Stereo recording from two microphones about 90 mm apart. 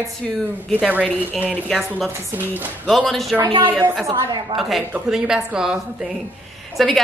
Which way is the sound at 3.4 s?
65° right (ahead or behind).